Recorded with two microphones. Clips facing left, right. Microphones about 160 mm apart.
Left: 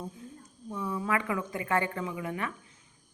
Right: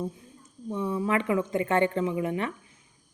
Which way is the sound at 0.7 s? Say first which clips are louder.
Right 4 dB; 25° right (ahead or behind).